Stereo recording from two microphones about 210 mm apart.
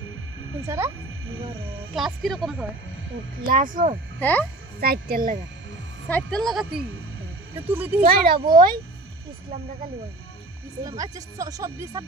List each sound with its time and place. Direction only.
0.7 s speech: 15° right (ahead or behind)
2.0 s a woman's voice: centre (ahead or behind)
3.4 s speech: 40° right (ahead or behind)
4.2 s speech: 10° left (ahead or behind)
4.7 s speech: 45° right (ahead or behind)
6.0 s a woman's voice: 5° left (ahead or behind)
8.0 s speech: 45° right (ahead or behind)
10.8 s speech: 15° right (ahead or behind)